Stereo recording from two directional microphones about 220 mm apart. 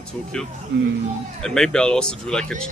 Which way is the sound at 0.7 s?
50° right (ahead or behind).